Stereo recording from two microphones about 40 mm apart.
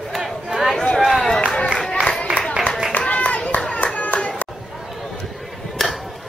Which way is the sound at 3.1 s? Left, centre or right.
Left.